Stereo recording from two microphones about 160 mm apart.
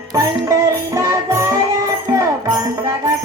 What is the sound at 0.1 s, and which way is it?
Music, 20° right (ahead or behind).